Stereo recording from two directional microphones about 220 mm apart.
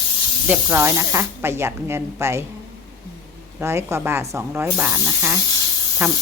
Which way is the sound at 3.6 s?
10° right (ahead or behind).